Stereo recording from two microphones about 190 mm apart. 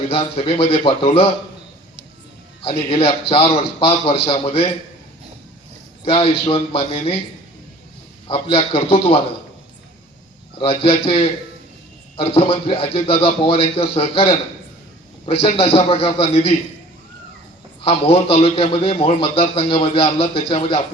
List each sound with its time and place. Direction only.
0.1 s a man's voice: 30° left (ahead or behind)
2.9 s a man's voice: 30° left (ahead or behind)
6.1 s speech: 30° left (ahead or behind)
8.3 s a man's voice: 30° left (ahead or behind)
10.6 s a man's voice: 30° left (ahead or behind)
17.8 s a man's voice: 30° left (ahead or behind)